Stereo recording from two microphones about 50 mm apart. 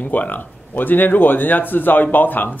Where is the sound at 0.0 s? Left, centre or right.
Left.